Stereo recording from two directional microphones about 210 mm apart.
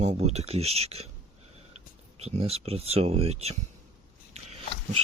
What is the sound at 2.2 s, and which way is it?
Speech, 30° right (ahead or behind).